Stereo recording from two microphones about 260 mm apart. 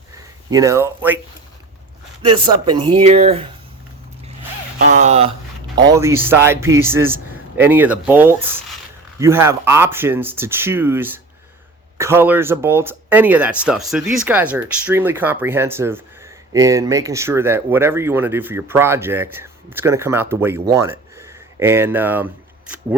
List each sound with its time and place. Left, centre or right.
0.5 s speech: centre
2.2 s speech: centre
4.9 s speech: right; by 22.3 s centre